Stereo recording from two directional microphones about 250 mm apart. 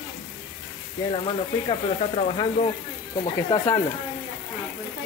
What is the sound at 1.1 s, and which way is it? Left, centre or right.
Speech, left.